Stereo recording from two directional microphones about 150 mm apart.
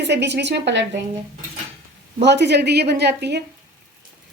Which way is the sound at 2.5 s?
90° right.